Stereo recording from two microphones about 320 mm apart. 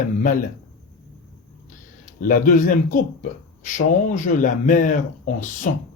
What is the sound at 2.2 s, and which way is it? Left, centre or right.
Speech, left.